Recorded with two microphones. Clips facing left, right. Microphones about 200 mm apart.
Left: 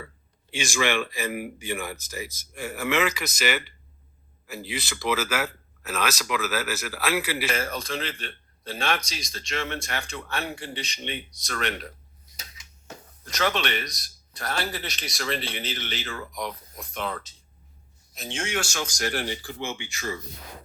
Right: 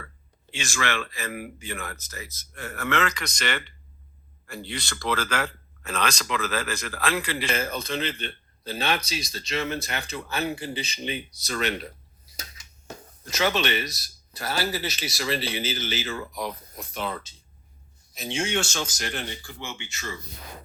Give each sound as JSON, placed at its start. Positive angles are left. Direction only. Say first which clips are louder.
{"t": 0.5, "sound": "speech", "louder": "left 4 dB", "side_deg": 15}
{"t": 18.6, "sound": "speech", "louder": "right 1 dB", "side_deg": -25}
{"t": 18.9, "sound": "speech", "louder": "left 4 dB", "side_deg": 5}